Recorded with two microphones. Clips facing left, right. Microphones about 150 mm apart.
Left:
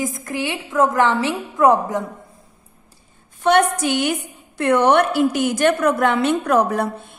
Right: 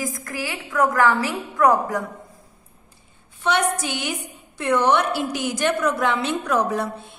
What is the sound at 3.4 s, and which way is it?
A woman's voice, 55° left (ahead or behind).